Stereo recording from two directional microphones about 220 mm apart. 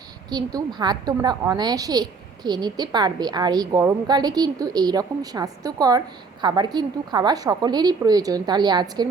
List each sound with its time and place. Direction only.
0.3 s a woman's voice: 20° right (ahead or behind)